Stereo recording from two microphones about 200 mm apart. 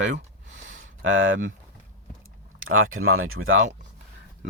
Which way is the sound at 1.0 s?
75° right (ahead or behind).